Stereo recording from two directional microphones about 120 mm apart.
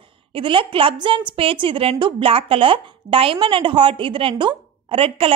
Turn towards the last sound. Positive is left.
turn(degrees=-50)  # may be behind; listen again after turning